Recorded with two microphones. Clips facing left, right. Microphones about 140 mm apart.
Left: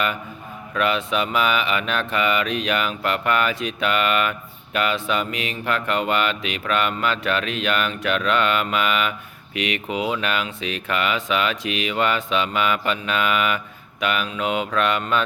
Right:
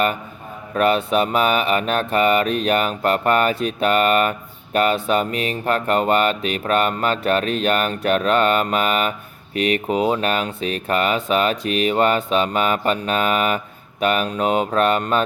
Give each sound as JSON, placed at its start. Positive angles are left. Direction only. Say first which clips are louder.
{"t": 0.7, "sound": "speech", "louder": "right 5 dB", "side_deg": -45}